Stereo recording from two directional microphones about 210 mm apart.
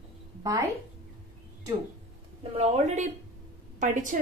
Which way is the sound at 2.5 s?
30° right (ahead or behind).